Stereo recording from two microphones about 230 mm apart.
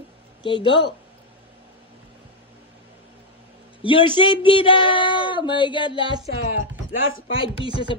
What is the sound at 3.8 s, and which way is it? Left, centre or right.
Speech, left.